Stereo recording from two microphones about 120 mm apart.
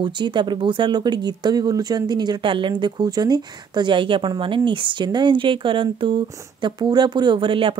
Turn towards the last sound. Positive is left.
turn(degrees=-45)  # may be behind; listen again after turning